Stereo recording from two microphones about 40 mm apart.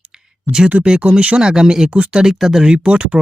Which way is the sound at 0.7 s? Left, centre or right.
Right.